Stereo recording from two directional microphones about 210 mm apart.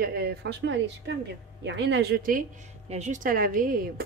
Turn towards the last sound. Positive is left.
turn(degrees=-40)  # may be behind; listen again after turning